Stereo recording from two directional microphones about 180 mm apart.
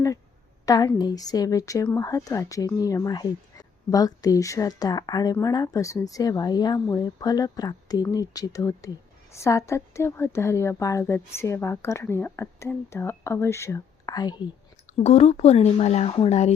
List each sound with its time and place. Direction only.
0.6 s a woman's voice: 20° left (ahead or behind)
15.0 s speech: 35° left (ahead or behind)